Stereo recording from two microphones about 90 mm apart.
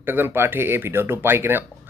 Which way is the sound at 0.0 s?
25° right (ahead or behind).